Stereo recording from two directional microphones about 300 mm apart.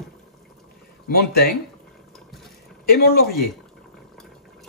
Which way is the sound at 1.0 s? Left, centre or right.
Left.